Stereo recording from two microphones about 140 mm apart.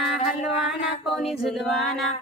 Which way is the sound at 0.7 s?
5° right (ahead or behind).